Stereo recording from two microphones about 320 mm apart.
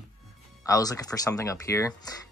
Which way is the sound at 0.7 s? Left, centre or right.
Centre.